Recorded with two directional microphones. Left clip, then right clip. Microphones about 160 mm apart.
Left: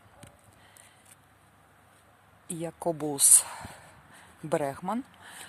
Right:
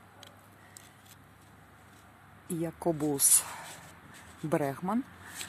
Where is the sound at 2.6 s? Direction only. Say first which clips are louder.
Even; 25° left (ahead or behind).